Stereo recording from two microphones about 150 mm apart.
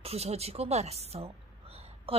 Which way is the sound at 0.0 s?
45° right (ahead or behind).